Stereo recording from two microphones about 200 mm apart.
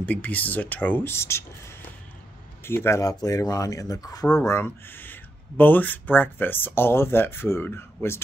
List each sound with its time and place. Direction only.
0.0 s speech: 10° left (ahead or behind)